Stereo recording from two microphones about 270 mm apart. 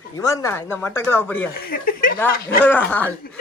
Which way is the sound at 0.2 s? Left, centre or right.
Centre.